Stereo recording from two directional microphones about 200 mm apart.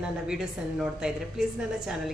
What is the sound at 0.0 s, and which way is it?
A woman's voice, 5° right (ahead or behind).